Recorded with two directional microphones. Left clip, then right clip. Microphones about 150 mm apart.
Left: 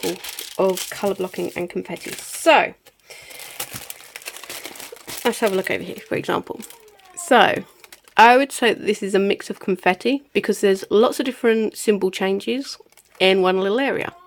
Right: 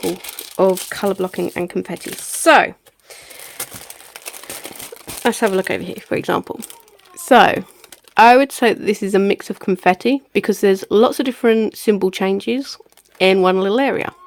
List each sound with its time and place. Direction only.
0.9 s speech: 40° right (ahead or behind)
5.0 s speech: 35° right (ahead or behind)